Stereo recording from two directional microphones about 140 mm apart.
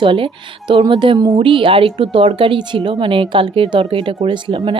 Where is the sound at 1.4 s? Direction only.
40° right (ahead or behind).